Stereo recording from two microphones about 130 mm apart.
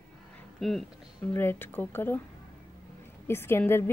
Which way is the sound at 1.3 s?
15° left (ahead or behind).